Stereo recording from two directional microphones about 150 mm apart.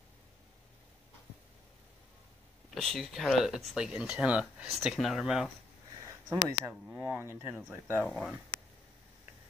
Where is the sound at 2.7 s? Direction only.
Centre (ahead or behind).